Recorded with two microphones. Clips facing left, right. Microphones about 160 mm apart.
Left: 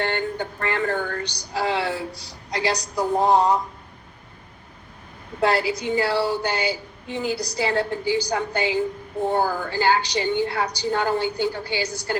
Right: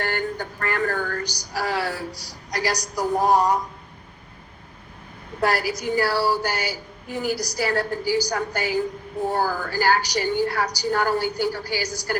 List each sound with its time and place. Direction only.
0.0 s a woman's voice: 25° left (ahead or behind)
5.4 s a woman's voice: 25° left (ahead or behind)